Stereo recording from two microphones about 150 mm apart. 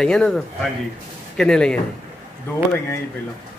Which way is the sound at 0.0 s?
5° left (ahead or behind).